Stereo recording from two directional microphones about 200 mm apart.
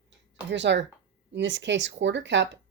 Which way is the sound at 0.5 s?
60° right (ahead or behind).